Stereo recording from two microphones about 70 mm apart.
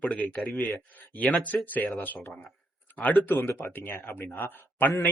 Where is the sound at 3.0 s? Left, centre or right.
Left.